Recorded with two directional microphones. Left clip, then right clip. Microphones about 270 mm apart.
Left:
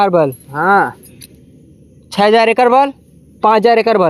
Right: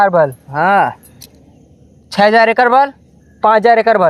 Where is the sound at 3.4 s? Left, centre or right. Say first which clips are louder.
Right 1 dB; centre.